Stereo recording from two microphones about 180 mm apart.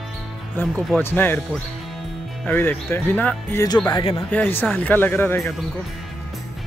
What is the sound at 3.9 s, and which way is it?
Speech, 25° left (ahead or behind).